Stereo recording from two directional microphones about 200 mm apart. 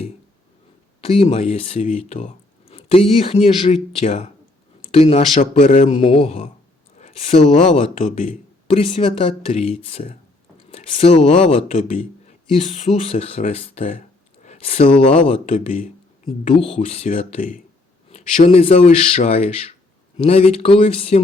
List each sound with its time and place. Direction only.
1.0 s speech: 30° left (ahead or behind)